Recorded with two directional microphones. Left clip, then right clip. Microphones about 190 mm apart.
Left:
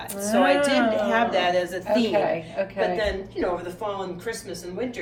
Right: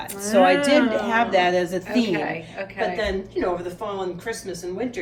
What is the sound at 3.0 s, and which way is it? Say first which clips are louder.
Speech: right 1 dB; 5° right (ahead or behind).